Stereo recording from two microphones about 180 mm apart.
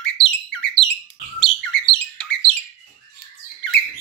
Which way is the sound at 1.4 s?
5° left (ahead or behind).